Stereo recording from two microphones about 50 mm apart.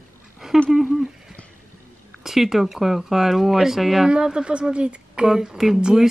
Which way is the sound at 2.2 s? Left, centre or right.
Centre.